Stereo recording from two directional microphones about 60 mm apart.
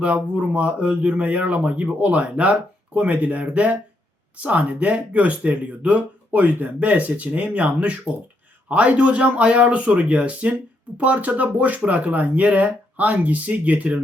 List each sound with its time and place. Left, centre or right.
0.0 s speech: right